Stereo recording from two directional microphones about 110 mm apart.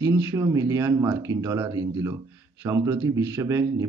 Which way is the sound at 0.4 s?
30° right (ahead or behind).